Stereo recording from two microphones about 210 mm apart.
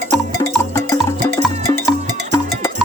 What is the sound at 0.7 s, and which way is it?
Music, 15° left (ahead or behind).